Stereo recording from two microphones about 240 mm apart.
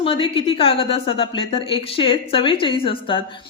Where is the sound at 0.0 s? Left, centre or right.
Left.